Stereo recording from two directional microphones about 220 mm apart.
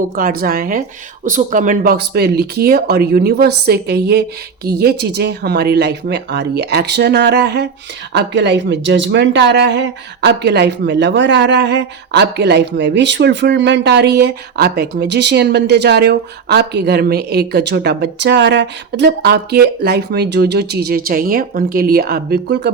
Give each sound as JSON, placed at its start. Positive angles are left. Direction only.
{"t": 0.2, "sound": "speech", "side_deg": -40}